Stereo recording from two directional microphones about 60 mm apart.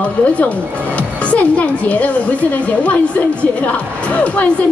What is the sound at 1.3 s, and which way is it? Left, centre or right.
A woman's voice, left.